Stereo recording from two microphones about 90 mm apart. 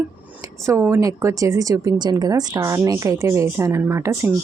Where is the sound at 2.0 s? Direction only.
50° right (ahead or behind); by 4.3 s 30° right (ahead or behind).